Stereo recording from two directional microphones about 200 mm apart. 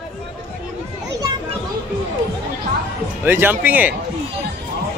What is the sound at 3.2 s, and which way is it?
Speech, 10° right (ahead or behind).